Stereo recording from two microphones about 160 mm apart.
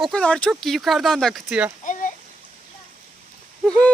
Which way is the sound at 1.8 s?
55° left (ahead or behind).